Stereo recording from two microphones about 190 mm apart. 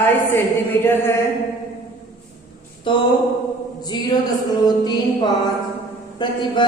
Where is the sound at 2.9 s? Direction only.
25° left (ahead or behind).